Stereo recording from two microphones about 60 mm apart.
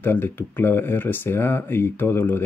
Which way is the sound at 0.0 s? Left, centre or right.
Left.